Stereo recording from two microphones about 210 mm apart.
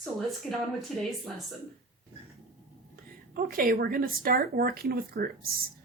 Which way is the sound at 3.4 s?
45° right (ahead or behind).